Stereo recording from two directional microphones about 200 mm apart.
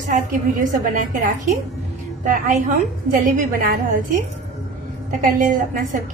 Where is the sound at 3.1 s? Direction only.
45° right (ahead or behind).